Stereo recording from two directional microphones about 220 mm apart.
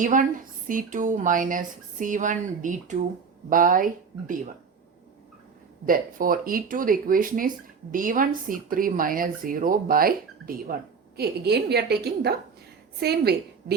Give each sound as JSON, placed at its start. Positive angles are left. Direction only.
{"t": 0.0, "sound": "speech", "side_deg": -35}
{"t": 5.8, "sound": "a woman's voice", "side_deg": -40}